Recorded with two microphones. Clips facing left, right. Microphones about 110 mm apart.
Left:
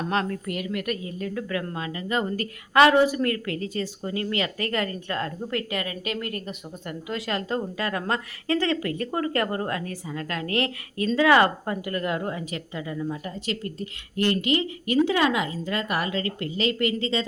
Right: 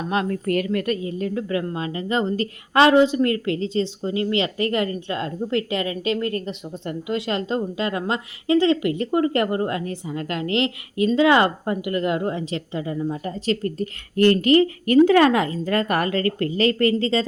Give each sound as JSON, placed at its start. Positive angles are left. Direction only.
{"t": 0.0, "sound": "speech", "side_deg": -10}
{"t": 0.3, "sound": "a woman's voice", "side_deg": -45}